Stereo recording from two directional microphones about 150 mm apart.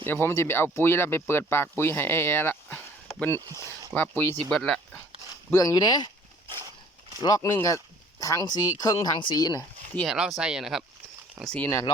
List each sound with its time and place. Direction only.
0.0 s speech: 15° left (ahead or behind)
5.5 s speech: 25° left (ahead or behind)
7.2 s speech: 25° left (ahead or behind)
9.9 s speech: 5° left (ahead or behind)